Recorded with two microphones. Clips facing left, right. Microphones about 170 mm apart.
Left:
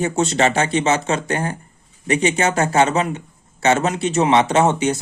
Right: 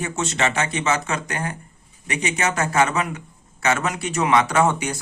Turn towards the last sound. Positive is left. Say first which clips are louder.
# left 4 dB
turn(degrees=25)  # may be behind; listen again after turning